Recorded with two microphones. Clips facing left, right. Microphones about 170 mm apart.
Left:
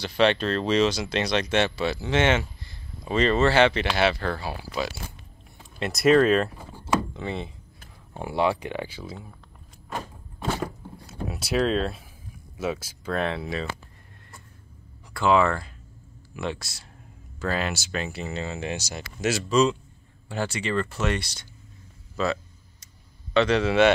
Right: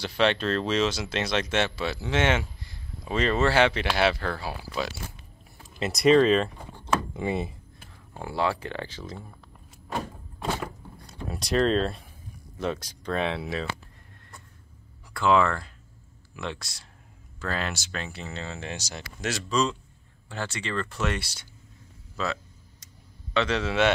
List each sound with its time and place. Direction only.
0.0 s speech: centre (ahead or behind)
7.2 s speech: 10° right (ahead or behind)
8.1 s speech: 20° left (ahead or behind)
11.2 s speech: 5° left (ahead or behind)
15.1 s speech: 5° left (ahead or behind)
20.9 s speech: centre (ahead or behind)